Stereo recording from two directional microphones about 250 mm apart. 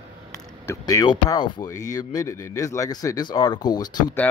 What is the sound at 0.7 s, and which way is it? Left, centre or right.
Speech, centre.